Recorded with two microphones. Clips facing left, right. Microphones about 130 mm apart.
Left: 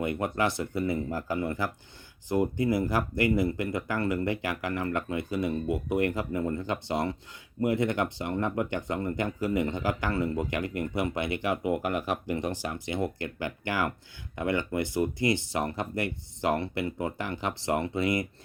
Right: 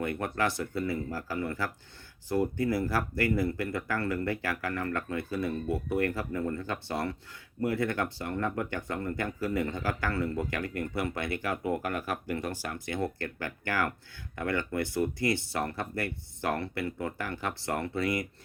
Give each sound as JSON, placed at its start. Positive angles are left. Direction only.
{"t": 0.0, "sound": "speech", "side_deg": 15}